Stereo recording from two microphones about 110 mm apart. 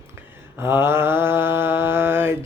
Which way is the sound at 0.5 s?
20° right (ahead or behind).